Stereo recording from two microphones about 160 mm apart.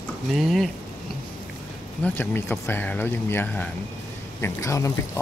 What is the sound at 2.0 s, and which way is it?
Speech, 10° left (ahead or behind).